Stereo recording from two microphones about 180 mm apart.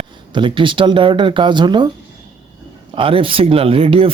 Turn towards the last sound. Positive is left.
turn(degrees=-30)  # may be behind; listen again after turning